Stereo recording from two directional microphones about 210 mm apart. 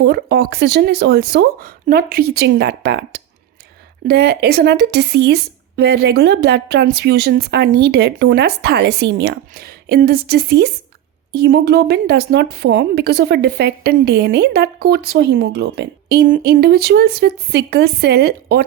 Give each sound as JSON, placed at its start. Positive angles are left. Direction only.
{"t": 0.0, "sound": "speech", "side_deg": -50}